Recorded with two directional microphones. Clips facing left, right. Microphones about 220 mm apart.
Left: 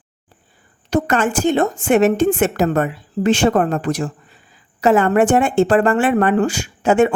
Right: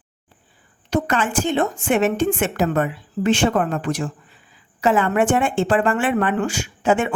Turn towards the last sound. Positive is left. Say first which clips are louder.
# left 5 dB
turn(degrees=40)  # may be behind; listen again after turning